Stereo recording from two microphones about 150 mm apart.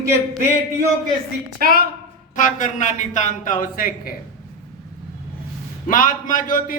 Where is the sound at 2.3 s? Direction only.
55° left (ahead or behind).